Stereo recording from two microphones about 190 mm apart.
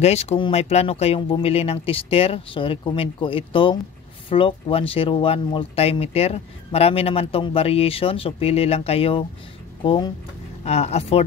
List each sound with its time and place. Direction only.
0.0 s speech: 35° left (ahead or behind)
10.6 s speech: 35° left (ahead or behind)